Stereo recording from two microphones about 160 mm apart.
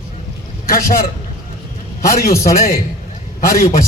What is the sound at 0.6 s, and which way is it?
Speech, 65° left (ahead or behind).